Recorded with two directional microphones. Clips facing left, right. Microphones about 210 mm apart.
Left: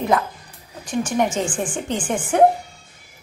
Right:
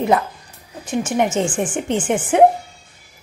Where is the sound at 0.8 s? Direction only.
25° right (ahead or behind).